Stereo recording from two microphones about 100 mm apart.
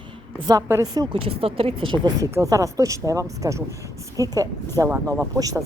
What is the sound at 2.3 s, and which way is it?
Speech, 35° right (ahead or behind).